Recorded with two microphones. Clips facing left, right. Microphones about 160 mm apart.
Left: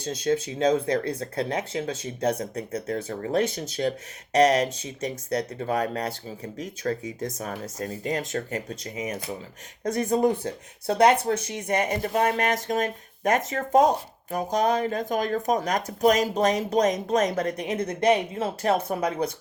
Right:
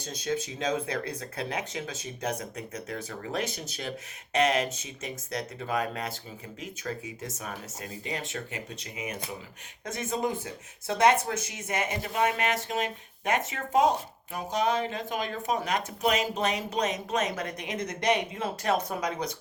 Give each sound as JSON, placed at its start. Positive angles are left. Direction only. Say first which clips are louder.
{"t": 0.3, "sound": "speech", "louder": "left 7 dB", "side_deg": 30}
{"t": 3.1, "sound": "speech", "louder": "left 8 dB", "side_deg": 45}